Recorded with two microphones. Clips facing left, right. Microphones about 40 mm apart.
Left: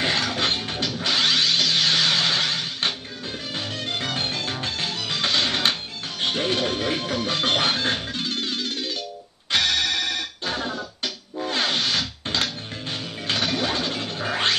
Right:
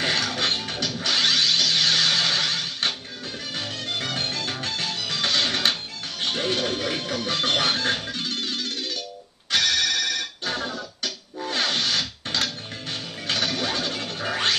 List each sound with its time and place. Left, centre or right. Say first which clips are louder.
0.0 s music: left 1 dB; left
1.0 s vehicle: left 1 dB; left
3.5 s music: left 1 dB; left
13.3 s music: left 2 dB; left